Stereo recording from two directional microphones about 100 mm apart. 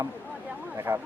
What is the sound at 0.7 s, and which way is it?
Speech, 25° right (ahead or behind).